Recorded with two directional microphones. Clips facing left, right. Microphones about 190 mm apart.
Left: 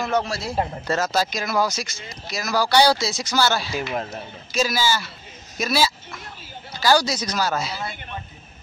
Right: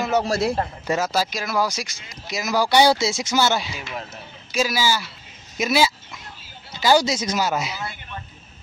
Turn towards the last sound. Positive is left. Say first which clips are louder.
# right 1 dB
turn(degrees=-20)  # may be behind; listen again after turning